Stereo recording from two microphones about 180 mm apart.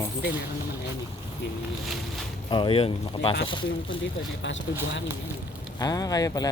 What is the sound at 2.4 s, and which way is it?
Speech, 25° left (ahead or behind).